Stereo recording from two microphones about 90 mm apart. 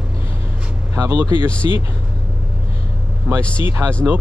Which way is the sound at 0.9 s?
35° right (ahead or behind).